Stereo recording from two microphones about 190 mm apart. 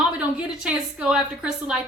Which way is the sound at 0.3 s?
5° right (ahead or behind).